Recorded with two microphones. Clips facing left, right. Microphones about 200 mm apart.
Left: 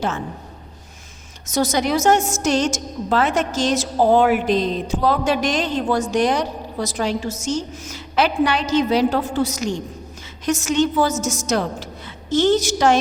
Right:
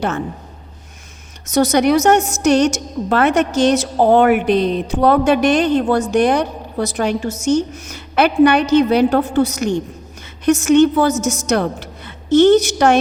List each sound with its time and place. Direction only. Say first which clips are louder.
1.5 s a woman's voice: right 6 dB; 65° right (ahead or behind)